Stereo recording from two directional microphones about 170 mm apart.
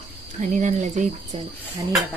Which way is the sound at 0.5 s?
45° right (ahead or behind).